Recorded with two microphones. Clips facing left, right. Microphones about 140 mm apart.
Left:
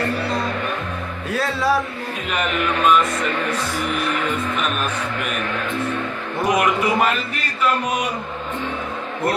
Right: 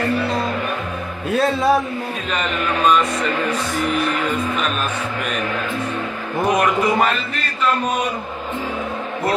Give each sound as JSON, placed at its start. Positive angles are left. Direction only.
{"t": 1.3, "sound": "music", "side_deg": -20}
{"t": 6.5, "sound": "a man's voice", "side_deg": 10}